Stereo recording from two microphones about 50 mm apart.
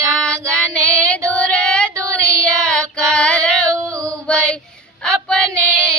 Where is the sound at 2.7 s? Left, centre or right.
Left.